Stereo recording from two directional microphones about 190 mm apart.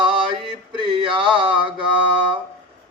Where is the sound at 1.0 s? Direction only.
25° right (ahead or behind).